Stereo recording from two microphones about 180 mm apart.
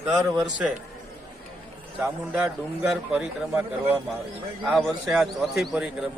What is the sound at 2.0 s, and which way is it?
A man's voice, 5° right (ahead or behind).